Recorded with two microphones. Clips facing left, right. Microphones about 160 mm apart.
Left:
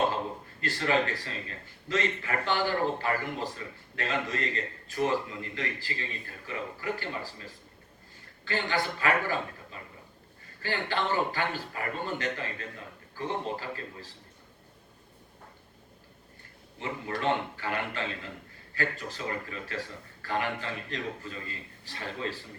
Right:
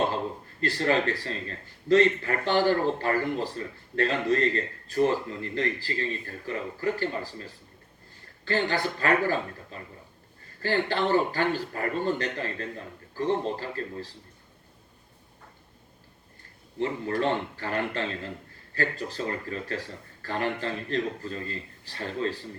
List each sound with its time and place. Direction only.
0.6 s a man's voice: 40° right (ahead or behind)
8.4 s a man's voice: 40° right (ahead or behind)
10.6 s a man's voice: 40° right (ahead or behind)
16.8 s a man's voice: 35° right (ahead or behind)